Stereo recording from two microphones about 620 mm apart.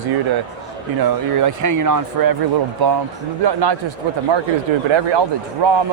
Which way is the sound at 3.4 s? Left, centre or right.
Right.